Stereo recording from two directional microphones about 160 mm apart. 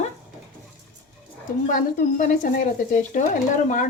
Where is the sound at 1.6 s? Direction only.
55° left (ahead or behind).